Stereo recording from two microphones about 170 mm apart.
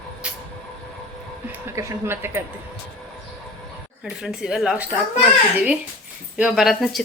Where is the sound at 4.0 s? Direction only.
Centre (ahead or behind).